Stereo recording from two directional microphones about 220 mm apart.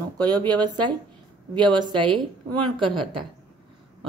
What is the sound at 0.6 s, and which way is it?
Speech, 20° right (ahead or behind).